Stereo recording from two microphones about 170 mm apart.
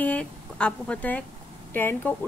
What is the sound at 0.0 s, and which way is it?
Speech, 5° left (ahead or behind).